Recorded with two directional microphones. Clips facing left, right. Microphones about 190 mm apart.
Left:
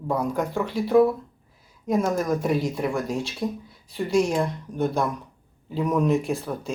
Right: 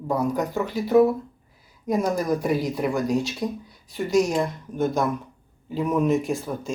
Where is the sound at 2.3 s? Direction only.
Centre (ahead or behind).